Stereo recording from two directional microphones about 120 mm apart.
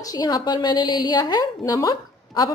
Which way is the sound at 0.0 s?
35° left (ahead or behind).